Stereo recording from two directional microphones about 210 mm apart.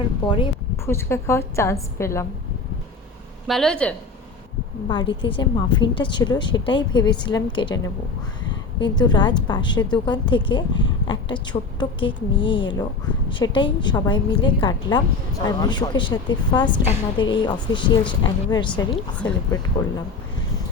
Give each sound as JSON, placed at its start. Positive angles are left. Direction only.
{"t": 0.3, "sound": "a woman's voice", "side_deg": 25}
{"t": 0.9, "sound": "a woman's voice", "side_deg": 10}
{"t": 3.4, "sound": "speech", "side_deg": 0}
{"t": 4.9, "sound": "a woman's voice", "side_deg": 25}